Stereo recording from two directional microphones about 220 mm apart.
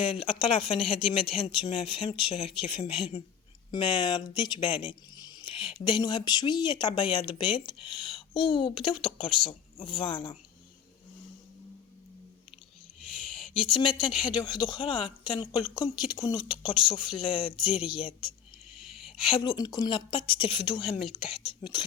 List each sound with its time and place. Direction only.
0.0 s speech: 25° left (ahead or behind)
13.5 s speech: 20° left (ahead or behind)
17.6 s speech: 5° right (ahead or behind)
17.9 s speech: 25° left (ahead or behind)
18.8 s a sound: centre (ahead or behind)
19.2 s speech: 25° left (ahead or behind)